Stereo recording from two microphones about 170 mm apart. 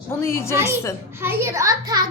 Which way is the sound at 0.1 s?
15° left (ahead or behind).